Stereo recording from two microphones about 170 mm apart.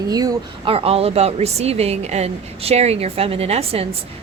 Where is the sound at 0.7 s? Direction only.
35° right (ahead or behind).